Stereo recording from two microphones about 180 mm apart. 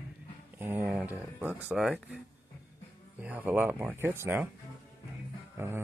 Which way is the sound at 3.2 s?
10° right (ahead or behind).